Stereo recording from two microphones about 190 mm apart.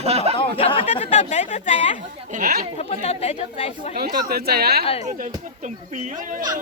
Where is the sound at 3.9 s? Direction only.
55° right (ahead or behind).